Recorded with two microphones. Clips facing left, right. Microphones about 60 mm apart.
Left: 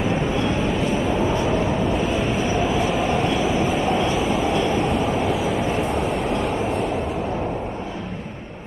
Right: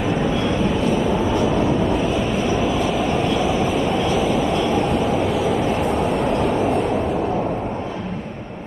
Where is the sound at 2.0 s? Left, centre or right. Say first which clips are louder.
Right 1 dB; centre.